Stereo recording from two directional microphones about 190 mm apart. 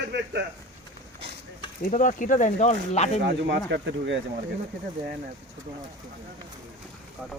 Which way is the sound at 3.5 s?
65° right (ahead or behind).